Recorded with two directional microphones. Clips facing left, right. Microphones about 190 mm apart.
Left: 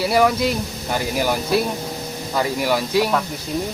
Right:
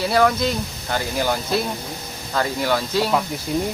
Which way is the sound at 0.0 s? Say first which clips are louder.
Left 1 dB; 10° left (ahead or behind).